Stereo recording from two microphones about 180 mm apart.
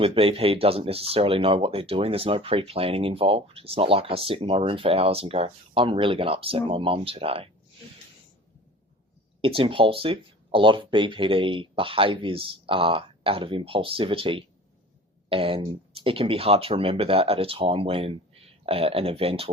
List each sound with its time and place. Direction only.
0.0 s speech: 30° right (ahead or behind)
9.4 s speech: 30° right (ahead or behind)